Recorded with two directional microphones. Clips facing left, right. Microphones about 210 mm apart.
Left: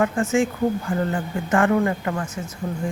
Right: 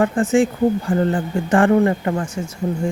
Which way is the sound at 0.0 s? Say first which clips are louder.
Right 4 dB; 35° right (ahead or behind).